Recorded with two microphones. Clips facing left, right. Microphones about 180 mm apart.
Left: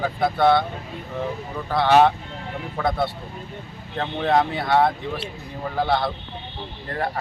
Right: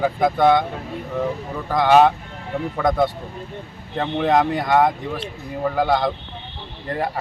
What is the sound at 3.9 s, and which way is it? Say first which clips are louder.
Speech: right 2 dB; 10° right (ahead or behind).